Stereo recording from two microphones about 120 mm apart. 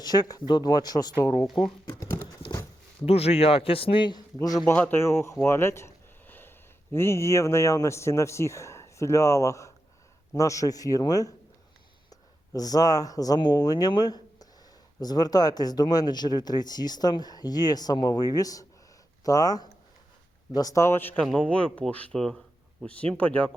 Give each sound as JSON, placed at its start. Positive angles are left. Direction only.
{"t": 0.0, "sound": "speech", "side_deg": 35}
{"t": 1.6, "sound": "speech", "side_deg": 50}
{"t": 1.9, "sound": "a sound", "side_deg": 20}
{"t": 3.1, "sound": "speech", "side_deg": 60}
{"t": 4.6, "sound": "speech", "side_deg": 5}
{"t": 4.9, "sound": "speech", "side_deg": 20}
{"t": 5.5, "sound": "a sound", "side_deg": 20}
{"t": 6.9, "sound": "speech", "side_deg": 20}
{"t": 12.5, "sound": "speech", "side_deg": 30}